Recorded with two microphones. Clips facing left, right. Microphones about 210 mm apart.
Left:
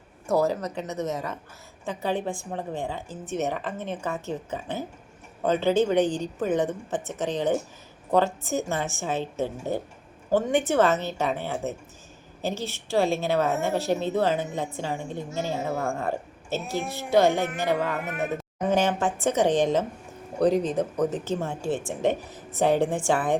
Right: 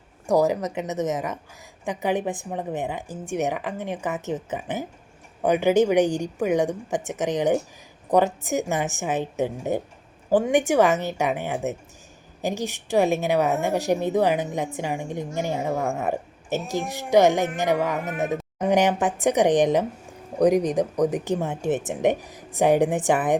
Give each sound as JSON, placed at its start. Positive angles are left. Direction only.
{"t": 0.3, "sound": "a woman's voice", "side_deg": -15}